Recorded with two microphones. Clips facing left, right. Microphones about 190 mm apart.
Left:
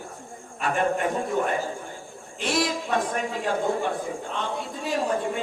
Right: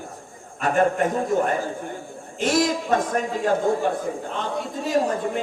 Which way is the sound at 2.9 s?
45° right (ahead or behind).